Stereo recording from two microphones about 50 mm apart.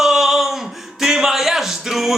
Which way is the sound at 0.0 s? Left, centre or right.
Centre.